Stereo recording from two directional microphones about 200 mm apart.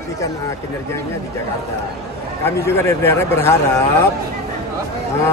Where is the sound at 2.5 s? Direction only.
15° left (ahead or behind).